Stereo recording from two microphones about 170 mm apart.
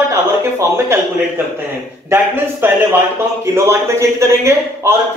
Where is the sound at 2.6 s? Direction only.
10° right (ahead or behind).